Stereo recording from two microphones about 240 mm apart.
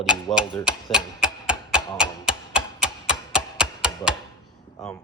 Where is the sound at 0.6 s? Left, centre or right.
Centre.